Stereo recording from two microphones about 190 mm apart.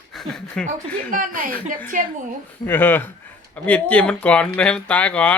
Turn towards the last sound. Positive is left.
turn(degrees=5)  # may be behind; listen again after turning